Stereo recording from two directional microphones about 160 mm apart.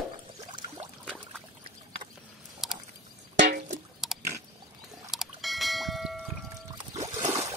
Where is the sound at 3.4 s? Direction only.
90° right.